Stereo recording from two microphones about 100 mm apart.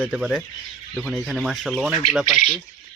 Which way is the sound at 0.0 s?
10° right (ahead or behind).